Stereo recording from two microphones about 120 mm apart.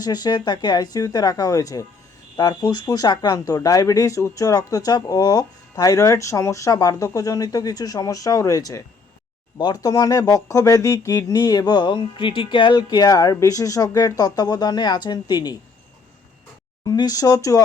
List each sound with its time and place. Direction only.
0.0 s speech: 35° left (ahead or behind)
16.8 s speech: 30° left (ahead or behind)